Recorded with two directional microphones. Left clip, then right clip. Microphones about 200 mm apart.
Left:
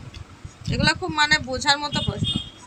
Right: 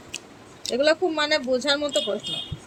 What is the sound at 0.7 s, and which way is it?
Speech, 20° left (ahead or behind).